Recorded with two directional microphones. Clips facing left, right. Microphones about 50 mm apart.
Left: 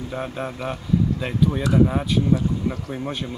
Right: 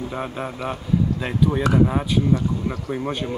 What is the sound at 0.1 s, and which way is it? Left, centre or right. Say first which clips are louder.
Speech: even; centre.